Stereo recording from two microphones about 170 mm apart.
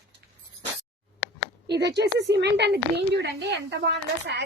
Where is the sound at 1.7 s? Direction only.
85° right.